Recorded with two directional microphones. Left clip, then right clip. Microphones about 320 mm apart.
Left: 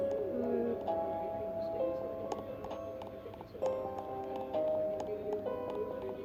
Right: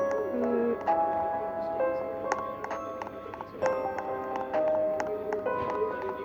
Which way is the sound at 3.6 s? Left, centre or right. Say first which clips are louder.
Right 7 dB; right.